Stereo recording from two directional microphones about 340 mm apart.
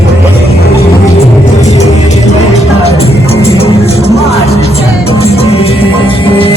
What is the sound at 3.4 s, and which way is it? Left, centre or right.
Music, centre.